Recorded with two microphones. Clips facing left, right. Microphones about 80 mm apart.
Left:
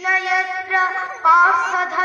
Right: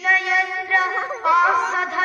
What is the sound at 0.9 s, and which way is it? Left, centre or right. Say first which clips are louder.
Speech: even; right.